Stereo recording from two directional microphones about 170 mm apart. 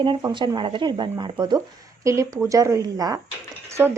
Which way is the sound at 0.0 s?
25° right (ahead or behind).